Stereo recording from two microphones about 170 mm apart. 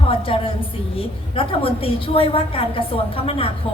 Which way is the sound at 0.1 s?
30° left (ahead or behind).